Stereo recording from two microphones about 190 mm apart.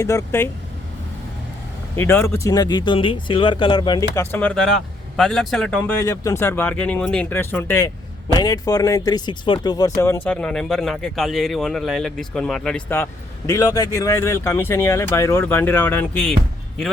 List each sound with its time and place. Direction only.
0.0 s speech: 15° left (ahead or behind)
2.0 s speech: 10° left (ahead or behind)
6.1 s speech: 15° left (ahead or behind)